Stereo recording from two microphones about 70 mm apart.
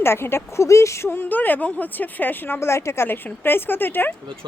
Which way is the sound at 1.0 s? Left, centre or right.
Left.